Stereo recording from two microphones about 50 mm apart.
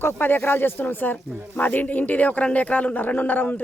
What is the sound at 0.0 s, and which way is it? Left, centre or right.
Speech, left.